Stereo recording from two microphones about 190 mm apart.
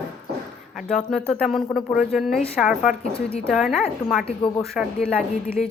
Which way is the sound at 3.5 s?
Centre (ahead or behind).